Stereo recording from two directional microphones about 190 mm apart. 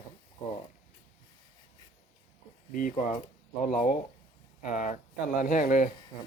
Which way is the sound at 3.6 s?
45° left (ahead or behind).